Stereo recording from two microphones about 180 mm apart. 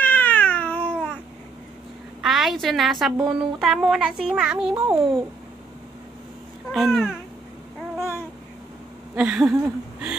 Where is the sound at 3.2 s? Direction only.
Centre (ahead or behind).